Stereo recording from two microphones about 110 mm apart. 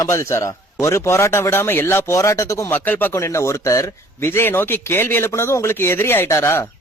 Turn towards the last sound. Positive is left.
turn(degrees=25)  # may be behind; listen again after turning